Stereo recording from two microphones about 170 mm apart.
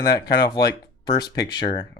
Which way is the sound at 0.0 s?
25° left (ahead or behind).